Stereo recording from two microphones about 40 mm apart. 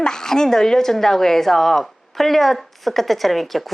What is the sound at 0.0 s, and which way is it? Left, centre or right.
A woman's voice, centre.